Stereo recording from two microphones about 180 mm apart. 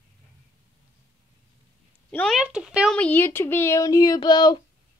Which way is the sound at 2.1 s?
Centre (ahead or behind).